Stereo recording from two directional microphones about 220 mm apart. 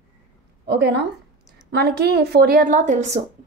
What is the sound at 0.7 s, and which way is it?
A woman's voice, 50° right (ahead or behind).